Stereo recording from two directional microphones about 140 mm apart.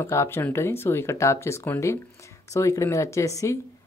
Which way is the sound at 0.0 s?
20° left (ahead or behind).